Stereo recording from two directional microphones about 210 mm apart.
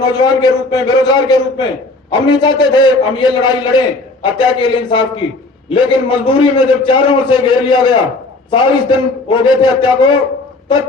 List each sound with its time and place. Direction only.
0.0 s a man's voice: 20° left (ahead or behind)